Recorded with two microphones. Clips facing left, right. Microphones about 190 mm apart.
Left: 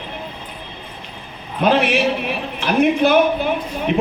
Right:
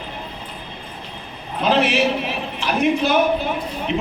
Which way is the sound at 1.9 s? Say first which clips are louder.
Left 1 dB; 55° left (ahead or behind).